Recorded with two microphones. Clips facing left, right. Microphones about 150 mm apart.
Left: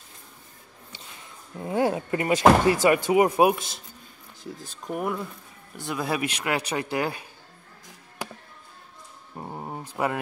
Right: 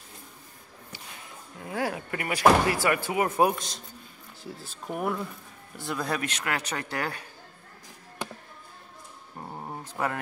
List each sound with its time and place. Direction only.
1.6 s speech: 25° left (ahead or behind)
9.4 s dog: 15° left (ahead or behind)